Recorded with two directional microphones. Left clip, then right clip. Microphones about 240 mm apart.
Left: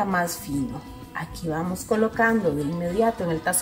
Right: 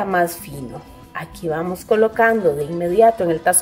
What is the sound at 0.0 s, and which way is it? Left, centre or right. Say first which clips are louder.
A woman's voice: right 6 dB; right.